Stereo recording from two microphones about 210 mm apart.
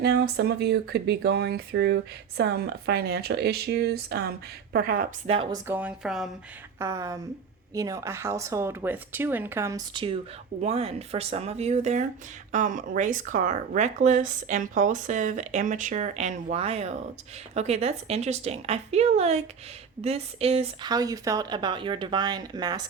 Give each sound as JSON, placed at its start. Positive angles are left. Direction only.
{"t": 0.0, "sound": "speech", "side_deg": -50}
{"t": 5.3, "sound": "speech", "side_deg": -25}
{"t": 5.6, "sound": "a woman's voice", "side_deg": -5}
{"t": 6.7, "sound": "speech", "side_deg": -15}